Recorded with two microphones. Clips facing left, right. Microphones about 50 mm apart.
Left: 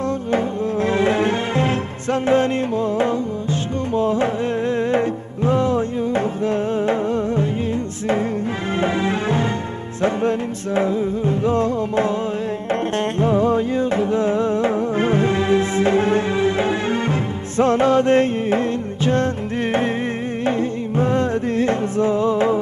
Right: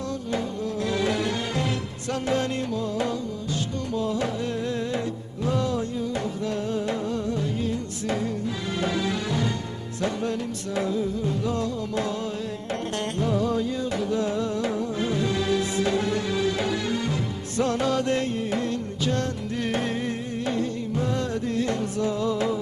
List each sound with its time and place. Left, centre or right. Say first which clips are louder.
0.3 s music: left 7 dB; left
10.8 s music: left 6 dB; left
13.1 s music: left 7 dB; left
20.4 s music: left 6 dB; left